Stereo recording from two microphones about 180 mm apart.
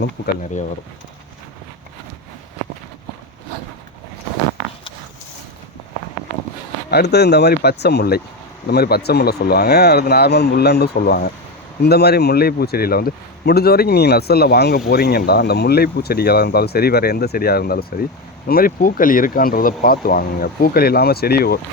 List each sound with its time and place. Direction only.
6.9 s speech: 65° left (ahead or behind)